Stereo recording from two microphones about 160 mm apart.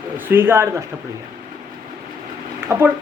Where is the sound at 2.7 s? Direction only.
20° right (ahead or behind).